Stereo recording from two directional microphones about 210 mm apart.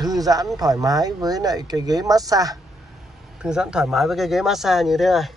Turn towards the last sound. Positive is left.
turn(degrees=0)  # may be behind; listen again after turning